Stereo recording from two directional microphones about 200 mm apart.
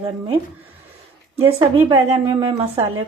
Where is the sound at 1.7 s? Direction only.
30° right (ahead or behind).